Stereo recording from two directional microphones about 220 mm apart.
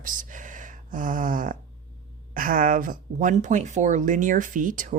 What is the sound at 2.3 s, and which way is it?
Speech, 40° right (ahead or behind).